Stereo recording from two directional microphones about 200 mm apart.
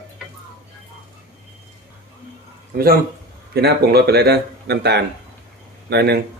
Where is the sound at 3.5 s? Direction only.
55° right (ahead or behind).